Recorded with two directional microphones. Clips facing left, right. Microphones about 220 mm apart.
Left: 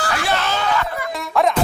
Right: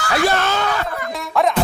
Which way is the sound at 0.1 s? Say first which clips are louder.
Right 7 dB; 40° right (ahead or behind).